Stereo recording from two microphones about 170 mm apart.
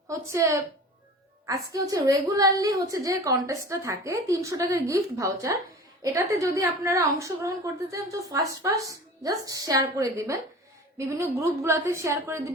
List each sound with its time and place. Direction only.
0.1 s a woman's voice: 15° right (ahead or behind)
1.5 s a woman's voice: 20° right (ahead or behind)